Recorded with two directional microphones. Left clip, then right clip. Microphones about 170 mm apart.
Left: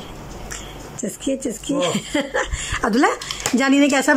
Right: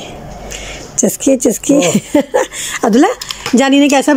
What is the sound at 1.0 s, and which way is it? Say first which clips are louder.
Speech: right 13 dB; 30° right (ahead or behind).